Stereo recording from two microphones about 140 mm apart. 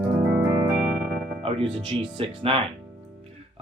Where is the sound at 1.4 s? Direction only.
45° right (ahead or behind).